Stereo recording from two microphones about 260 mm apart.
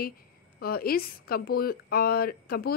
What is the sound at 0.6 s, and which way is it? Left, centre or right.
A woman's voice, left.